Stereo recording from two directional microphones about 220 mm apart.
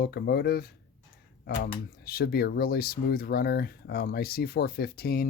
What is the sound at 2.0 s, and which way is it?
Speech, 45° left (ahead or behind).